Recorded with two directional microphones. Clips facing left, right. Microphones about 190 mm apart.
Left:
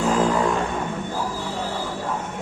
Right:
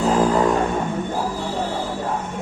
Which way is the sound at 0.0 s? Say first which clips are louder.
Right 3 dB; 40° right (ahead or behind).